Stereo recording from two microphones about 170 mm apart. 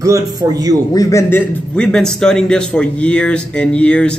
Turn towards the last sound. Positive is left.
turn(degrees=5)  # may be behind; listen again after turning